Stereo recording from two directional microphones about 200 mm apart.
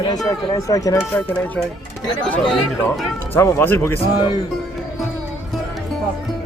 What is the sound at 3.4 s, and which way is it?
Speech, 10° left (ahead or behind).